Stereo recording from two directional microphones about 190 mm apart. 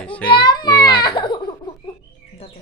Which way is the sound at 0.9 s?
25° left (ahead or behind).